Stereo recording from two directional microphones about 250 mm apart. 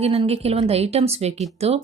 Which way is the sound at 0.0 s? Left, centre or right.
Right.